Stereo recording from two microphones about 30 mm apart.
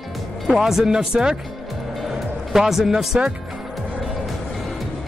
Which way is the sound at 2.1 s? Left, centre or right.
Centre.